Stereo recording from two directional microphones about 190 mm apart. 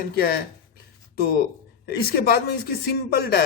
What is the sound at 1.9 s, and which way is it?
A man's voice, 55° left (ahead or behind).